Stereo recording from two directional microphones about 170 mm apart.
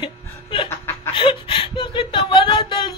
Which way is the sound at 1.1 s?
30° left (ahead or behind).